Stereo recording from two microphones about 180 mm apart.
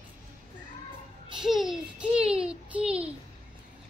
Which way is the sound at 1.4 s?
Centre (ahead or behind).